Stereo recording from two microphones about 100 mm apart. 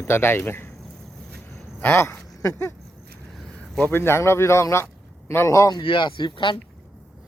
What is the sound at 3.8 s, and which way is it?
A man's voice, 20° left (ahead or behind).